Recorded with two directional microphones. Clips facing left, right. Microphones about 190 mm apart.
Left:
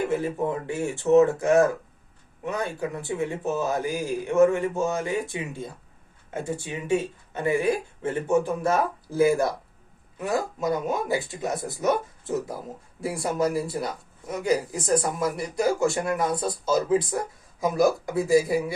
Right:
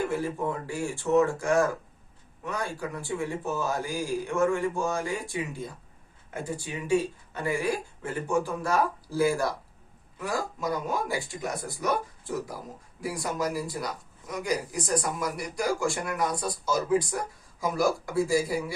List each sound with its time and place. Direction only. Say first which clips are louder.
0.1 s speech: left 4 dB; 20° left (ahead or behind)